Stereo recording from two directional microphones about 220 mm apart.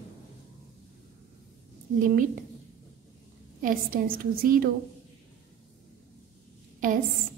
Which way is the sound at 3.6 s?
40° right (ahead or behind).